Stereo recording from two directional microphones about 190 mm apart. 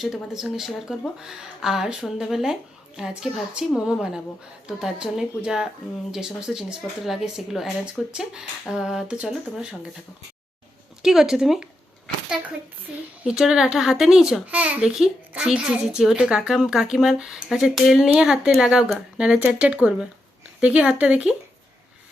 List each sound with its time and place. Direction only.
0.0 s a child's voice: 5° right (ahead or behind)
11.0 s a child's voice: 5° right (ahead or behind)
12.9 s a child's voice: 5° right (ahead or behind)